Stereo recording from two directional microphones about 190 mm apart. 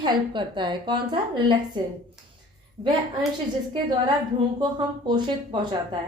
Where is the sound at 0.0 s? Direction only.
25° right (ahead or behind).